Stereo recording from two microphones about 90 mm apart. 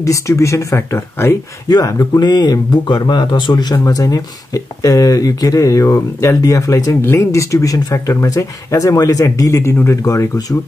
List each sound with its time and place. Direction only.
0.0 s speech: 35° left (ahead or behind)
1.7 s speech: 45° left (ahead or behind)
3.7 s speech: 40° left (ahead or behind)